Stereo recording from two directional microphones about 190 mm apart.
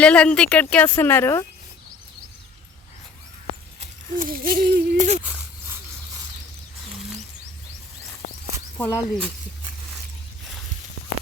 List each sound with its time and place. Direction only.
0.0 s speech: 5° left (ahead or behind)
3.8 s speech: 45° right (ahead or behind)
8.8 s speech: 5° left (ahead or behind)